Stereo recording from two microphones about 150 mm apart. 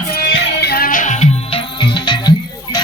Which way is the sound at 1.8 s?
30° left (ahead or behind).